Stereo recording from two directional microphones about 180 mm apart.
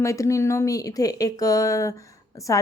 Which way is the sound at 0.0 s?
15° left (ahead or behind).